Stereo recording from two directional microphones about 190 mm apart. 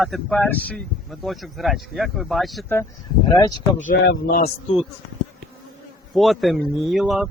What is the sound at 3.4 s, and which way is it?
Speech, 20° left (ahead or behind).